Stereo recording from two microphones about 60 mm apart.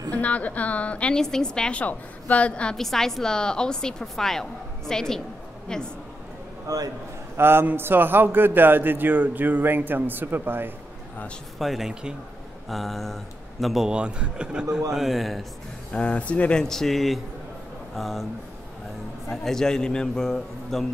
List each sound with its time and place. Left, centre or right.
0.1 s a woman's voice: left
1.1 s a woman's voice: centre
2.7 s a woman's voice: centre
6.7 s a man's voice: right
7.3 s a man's voice: right
11.5 s speech: centre
13.8 s a man's voice: centre
15.0 s speech: centre
15.9 s a woman's voice: centre
16.6 s speech: centre
19.2 s a woman's voice: centre